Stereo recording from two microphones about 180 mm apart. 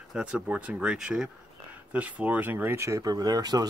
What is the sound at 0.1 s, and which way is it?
Speech, 5° right (ahead or behind).